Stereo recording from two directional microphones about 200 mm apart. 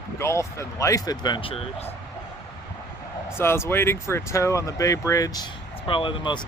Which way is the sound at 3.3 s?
10° left (ahead or behind).